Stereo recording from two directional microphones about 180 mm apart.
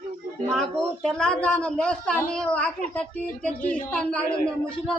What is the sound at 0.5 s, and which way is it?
A child's voice, 5° left (ahead or behind).